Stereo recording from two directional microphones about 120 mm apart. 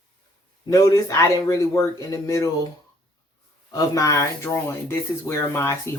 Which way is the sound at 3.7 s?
30° left (ahead or behind).